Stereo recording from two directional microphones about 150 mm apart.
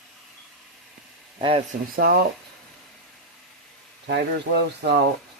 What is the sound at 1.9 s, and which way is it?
Speech, 90° right.